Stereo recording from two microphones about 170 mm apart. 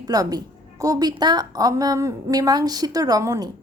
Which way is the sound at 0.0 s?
20° right (ahead or behind).